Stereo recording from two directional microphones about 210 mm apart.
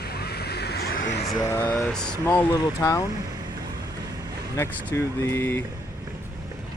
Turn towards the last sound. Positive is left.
turn(degrees=10)  # may be behind; listen again after turning